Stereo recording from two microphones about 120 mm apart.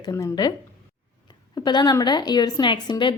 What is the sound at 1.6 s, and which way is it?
A woman's voice, 35° left (ahead or behind).